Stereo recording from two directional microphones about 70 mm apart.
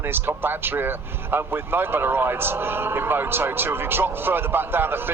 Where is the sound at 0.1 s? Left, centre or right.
Right.